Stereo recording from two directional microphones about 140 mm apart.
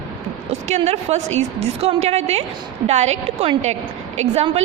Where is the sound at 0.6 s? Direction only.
50° right (ahead or behind).